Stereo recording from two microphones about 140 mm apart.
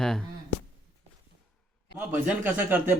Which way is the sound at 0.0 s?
5° left (ahead or behind).